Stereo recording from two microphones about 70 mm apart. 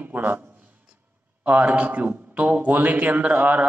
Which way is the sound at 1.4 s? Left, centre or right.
Right.